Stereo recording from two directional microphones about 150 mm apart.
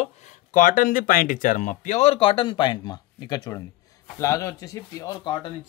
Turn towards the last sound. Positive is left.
turn(degrees=25)  # may be behind; listen again after turning